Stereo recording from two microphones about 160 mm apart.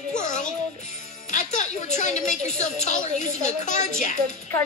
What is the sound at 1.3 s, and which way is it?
A woman's voice, 50° left (ahead or behind).